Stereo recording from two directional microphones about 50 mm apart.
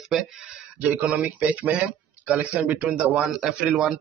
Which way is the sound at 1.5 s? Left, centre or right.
Right.